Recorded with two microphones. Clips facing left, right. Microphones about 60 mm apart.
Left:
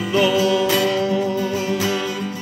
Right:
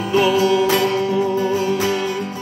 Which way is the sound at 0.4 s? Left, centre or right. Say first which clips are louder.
Right 2 dB; right.